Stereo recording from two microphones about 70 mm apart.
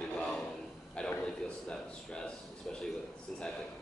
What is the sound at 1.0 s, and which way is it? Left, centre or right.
A man's voice, centre.